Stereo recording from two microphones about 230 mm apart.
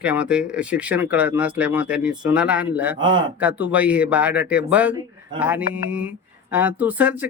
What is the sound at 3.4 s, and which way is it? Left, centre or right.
Speech, centre.